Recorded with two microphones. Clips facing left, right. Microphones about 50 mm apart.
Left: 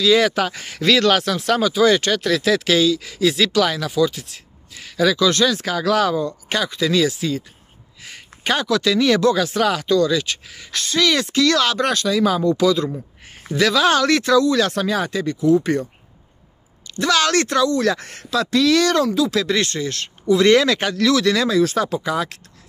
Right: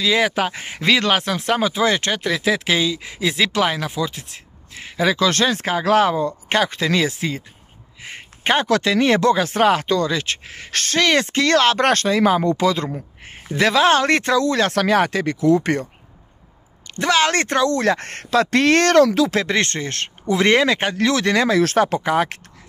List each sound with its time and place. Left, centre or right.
0.0 s speech: right
8.0 s a sound: right
8.8 s speech: right
12.3 s speech: right
16.8 s speech: right
17.6 s speech: right
19.0 s speech: right
19.3 s speech: right
20.5 s speech: right